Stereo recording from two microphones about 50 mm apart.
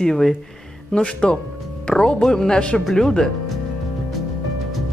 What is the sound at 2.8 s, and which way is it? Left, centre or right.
Speech, centre.